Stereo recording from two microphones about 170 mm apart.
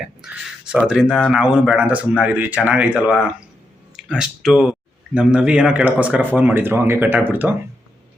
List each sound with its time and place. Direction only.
0.7 s speech: 5° right (ahead or behind)